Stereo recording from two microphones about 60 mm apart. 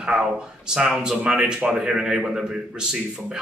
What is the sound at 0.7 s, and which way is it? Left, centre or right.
A man's voice, centre.